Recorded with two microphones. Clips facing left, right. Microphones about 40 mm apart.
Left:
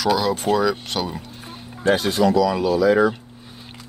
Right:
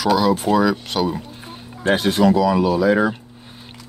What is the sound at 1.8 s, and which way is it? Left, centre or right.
Speech, right.